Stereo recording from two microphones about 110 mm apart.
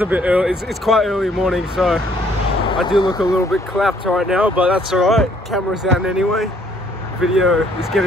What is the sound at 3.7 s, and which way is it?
Speech, centre (ahead or behind).